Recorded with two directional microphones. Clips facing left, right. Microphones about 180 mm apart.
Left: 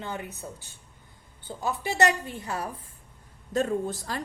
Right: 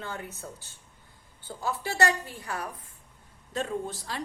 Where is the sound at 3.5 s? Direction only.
45° left (ahead or behind).